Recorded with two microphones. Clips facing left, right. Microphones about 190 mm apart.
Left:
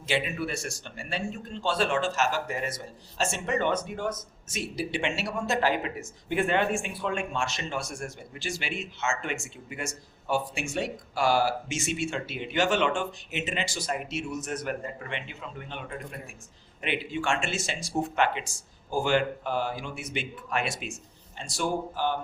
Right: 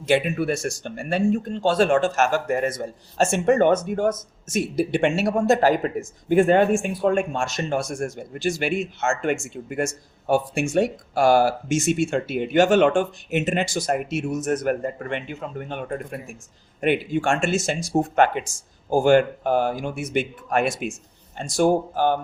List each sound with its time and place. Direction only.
0.0 s speech: 50° right (ahead or behind)